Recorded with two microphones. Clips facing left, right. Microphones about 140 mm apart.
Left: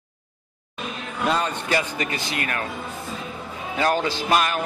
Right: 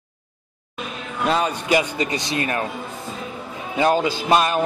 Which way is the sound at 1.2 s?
Centre (ahead or behind).